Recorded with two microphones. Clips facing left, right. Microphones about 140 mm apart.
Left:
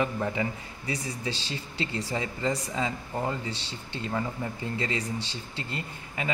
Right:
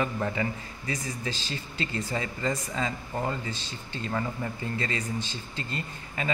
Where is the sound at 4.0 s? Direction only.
10° left (ahead or behind).